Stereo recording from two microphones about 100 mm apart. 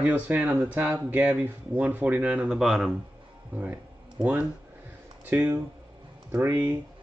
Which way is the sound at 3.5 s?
15° right (ahead or behind).